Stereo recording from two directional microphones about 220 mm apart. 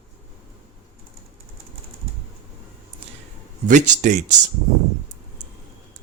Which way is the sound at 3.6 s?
35° right (ahead or behind).